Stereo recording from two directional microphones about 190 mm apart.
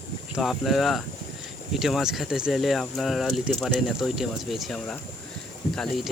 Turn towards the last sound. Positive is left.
turn(degrees=5)  # may be behind; listen again after turning